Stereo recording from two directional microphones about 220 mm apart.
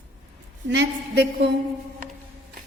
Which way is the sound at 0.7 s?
50° right (ahead or behind).